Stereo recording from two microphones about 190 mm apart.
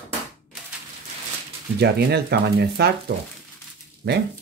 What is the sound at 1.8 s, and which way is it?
Speech, 60° right (ahead or behind).